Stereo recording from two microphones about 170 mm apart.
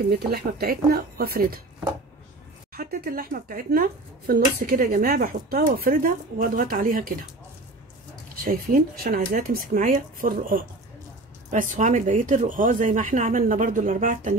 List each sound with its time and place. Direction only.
0.1 s speech: 65° right (ahead or behind)
2.7 s speech: 60° right (ahead or behind)
8.5 s speech: 55° right (ahead or behind)